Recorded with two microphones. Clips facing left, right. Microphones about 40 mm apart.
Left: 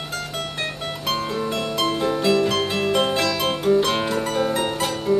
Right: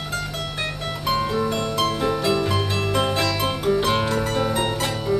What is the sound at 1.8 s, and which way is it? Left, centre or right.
Music, centre.